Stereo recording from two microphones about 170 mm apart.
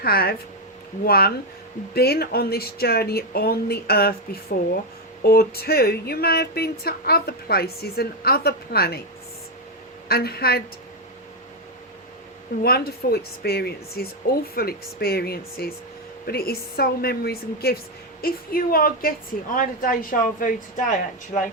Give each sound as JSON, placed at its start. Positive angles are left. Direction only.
{"t": 0.0, "sound": "speech", "side_deg": 65}
{"t": 10.1, "sound": "speech", "side_deg": 65}
{"t": 12.6, "sound": "speech", "side_deg": 65}